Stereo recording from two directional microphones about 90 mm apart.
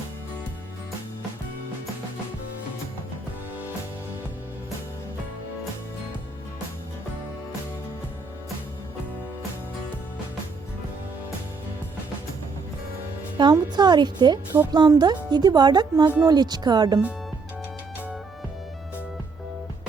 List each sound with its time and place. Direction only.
13.3 s speech: 55° right (ahead or behind)